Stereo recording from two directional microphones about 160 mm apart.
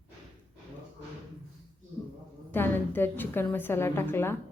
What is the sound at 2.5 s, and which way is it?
A woman's voice, 10° left (ahead or behind).